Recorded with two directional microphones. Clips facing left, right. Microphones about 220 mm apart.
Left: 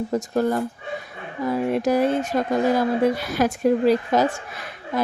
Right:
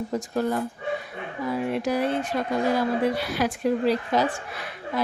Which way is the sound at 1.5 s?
45° left (ahead or behind).